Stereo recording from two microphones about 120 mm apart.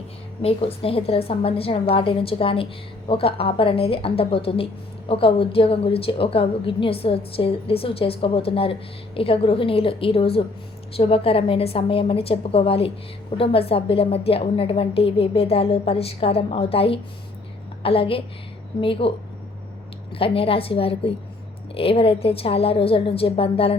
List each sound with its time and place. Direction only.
0.4 s a woman's voice: 55° left (ahead or behind)
20.1 s a woman's voice: 50° left (ahead or behind)